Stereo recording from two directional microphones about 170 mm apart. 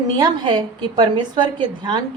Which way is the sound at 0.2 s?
25° right (ahead or behind).